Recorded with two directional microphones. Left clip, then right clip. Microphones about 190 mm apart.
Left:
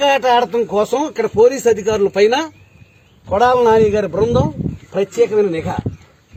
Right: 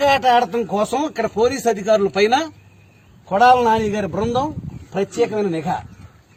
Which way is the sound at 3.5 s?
30° right (ahead or behind).